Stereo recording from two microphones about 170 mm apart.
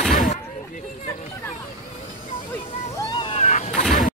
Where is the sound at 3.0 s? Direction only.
30° left (ahead or behind).